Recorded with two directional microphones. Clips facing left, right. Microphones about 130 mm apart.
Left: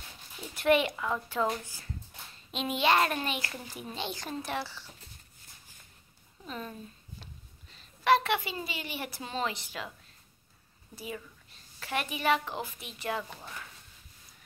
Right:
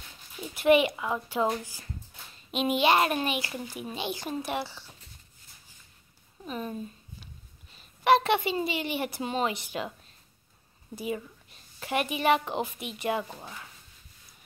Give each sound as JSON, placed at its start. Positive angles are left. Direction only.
{"t": 0.4, "sound": "a child's voice", "side_deg": -10}
{"t": 6.4, "sound": "a child's voice", "side_deg": -15}
{"t": 11.0, "sound": "a woman's voice", "side_deg": -20}